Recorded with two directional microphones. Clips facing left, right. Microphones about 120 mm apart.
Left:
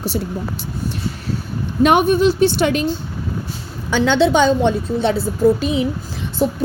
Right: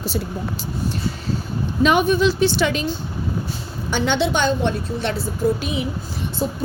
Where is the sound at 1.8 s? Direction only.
55° left (ahead or behind).